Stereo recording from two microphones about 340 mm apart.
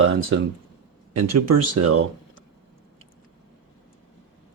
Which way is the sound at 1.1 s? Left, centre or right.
Right.